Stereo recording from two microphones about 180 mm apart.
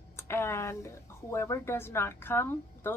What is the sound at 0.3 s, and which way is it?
Speech, 15° left (ahead or behind).